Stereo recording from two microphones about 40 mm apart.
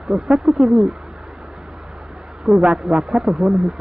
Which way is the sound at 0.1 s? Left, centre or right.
Centre.